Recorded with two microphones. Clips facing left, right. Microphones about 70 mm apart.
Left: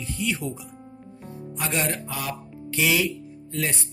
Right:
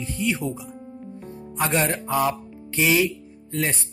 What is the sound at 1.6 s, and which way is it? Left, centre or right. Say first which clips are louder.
Music: right 4 dB; right.